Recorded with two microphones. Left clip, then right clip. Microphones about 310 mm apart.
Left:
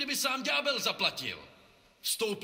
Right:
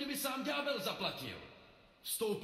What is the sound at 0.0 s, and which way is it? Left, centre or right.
A man's voice, left.